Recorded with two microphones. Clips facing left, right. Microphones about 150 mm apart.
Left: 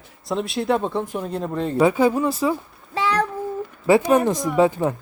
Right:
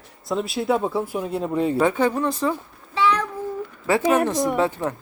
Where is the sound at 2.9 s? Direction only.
40° left (ahead or behind).